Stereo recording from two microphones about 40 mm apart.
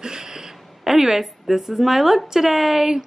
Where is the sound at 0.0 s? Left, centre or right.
Centre.